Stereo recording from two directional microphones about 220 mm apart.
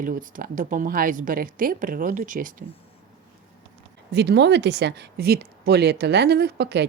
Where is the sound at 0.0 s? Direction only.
40° right (ahead or behind).